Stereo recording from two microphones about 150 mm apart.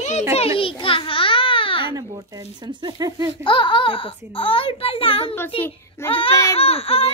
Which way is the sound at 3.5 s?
35° left (ahead or behind).